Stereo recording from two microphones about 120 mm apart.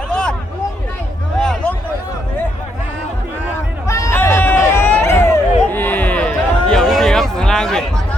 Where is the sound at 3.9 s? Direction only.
25° left (ahead or behind); by 7.8 s 5° left (ahead or behind).